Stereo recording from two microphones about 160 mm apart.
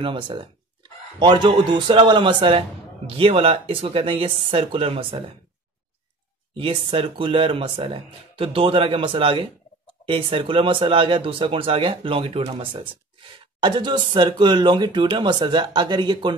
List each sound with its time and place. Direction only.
0.0 s speech: 30° right (ahead or behind)
6.5 s speech: 35° right (ahead or behind)